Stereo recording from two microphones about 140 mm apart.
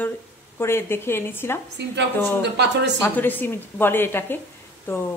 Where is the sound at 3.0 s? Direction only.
15° left (ahead or behind).